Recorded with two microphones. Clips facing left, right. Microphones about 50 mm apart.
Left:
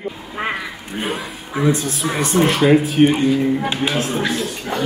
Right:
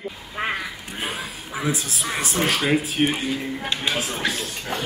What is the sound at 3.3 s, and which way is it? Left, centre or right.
Speech, centre.